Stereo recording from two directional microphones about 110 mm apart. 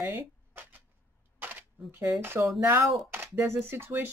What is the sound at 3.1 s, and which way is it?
Speech, 20° right (ahead or behind).